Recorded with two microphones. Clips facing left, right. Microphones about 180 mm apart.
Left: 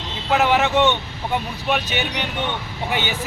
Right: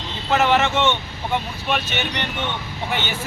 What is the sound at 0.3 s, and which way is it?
Speech, 5° left (ahead or behind).